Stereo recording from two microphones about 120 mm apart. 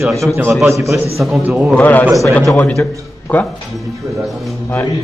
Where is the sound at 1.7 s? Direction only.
15° left (ahead or behind).